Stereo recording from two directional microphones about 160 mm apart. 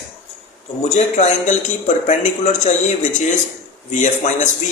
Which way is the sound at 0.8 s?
45° left (ahead or behind).